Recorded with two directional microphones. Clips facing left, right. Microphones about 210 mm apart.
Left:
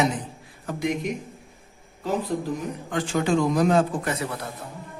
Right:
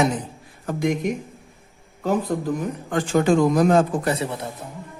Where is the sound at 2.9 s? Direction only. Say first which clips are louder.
Right 5 dB; 45° right (ahead or behind).